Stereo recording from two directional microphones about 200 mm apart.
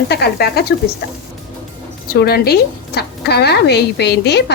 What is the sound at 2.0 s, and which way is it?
Speech, 50° left (ahead or behind).